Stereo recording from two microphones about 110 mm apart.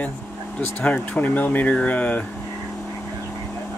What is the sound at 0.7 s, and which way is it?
Speech, 10° left (ahead or behind).